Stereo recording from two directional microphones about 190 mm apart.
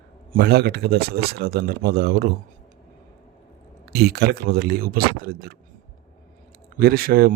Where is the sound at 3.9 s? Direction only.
55° right (ahead or behind).